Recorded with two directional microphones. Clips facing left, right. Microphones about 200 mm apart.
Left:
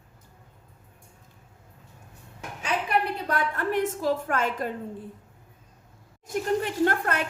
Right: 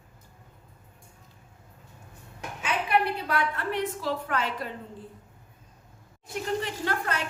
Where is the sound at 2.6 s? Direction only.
40° left (ahead or behind).